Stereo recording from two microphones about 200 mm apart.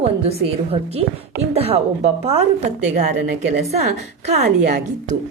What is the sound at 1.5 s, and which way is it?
Speech, 30° right (ahead or behind).